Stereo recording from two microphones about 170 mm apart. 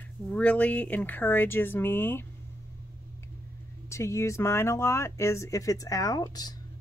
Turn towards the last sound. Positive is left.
turn(degrees=25)  # may be behind; listen again after turning